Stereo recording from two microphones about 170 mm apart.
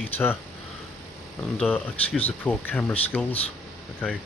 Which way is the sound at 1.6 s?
5° left (ahead or behind).